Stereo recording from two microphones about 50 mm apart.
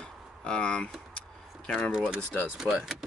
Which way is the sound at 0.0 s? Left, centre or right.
Centre.